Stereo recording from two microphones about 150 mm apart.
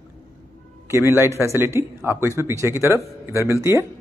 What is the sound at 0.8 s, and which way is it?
Speech, 15° right (ahead or behind).